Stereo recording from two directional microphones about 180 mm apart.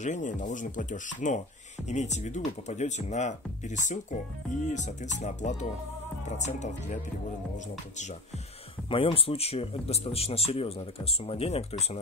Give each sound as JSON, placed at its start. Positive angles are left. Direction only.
{"t": 0.0, "sound": "speech", "side_deg": 45}
{"t": 8.9, "sound": "speech", "side_deg": 30}